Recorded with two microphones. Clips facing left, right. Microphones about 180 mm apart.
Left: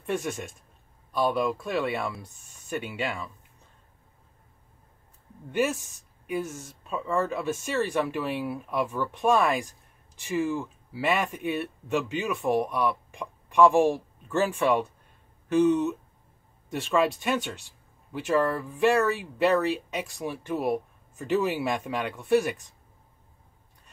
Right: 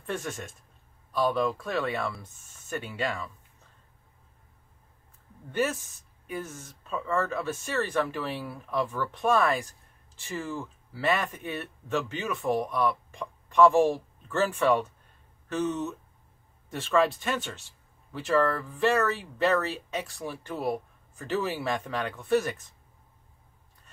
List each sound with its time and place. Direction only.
0.0 s speech: 15° left (ahead or behind)
5.5 s speech: 15° left (ahead or behind)